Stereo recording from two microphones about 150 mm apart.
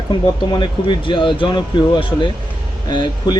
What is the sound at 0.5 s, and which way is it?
Speech, 30° left (ahead or behind).